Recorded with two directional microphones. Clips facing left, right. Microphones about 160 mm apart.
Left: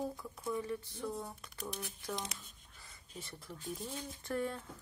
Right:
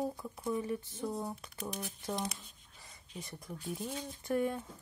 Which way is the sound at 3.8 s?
15° right (ahead or behind).